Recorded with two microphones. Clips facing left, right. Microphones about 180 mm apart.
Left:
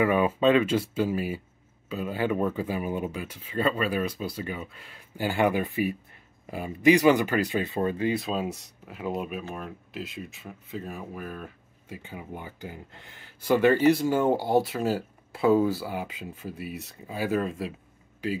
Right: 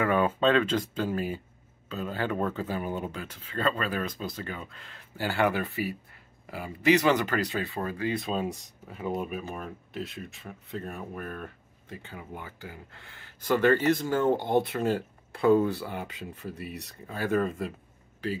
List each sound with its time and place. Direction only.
0.0 s speech: 10° left (ahead or behind)
8.1 s speech: 5° left (ahead or behind)